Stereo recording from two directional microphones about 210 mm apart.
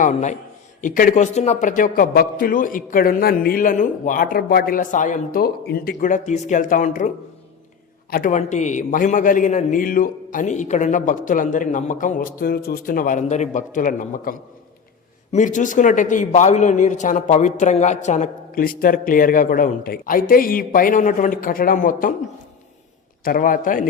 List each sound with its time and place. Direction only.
0.0 s a man's voice: 35° left (ahead or behind)
8.1 s a man's voice: 35° left (ahead or behind)
23.2 s a man's voice: 40° left (ahead or behind)